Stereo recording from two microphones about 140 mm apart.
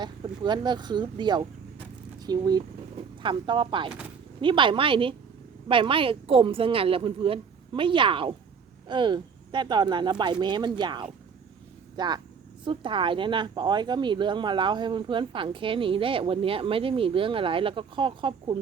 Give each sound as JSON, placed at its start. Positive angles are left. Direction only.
{"t": 0.0, "sound": "a woman's voice", "side_deg": -30}